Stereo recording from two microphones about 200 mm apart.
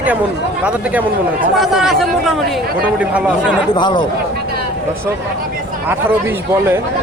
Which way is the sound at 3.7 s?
25° left (ahead or behind).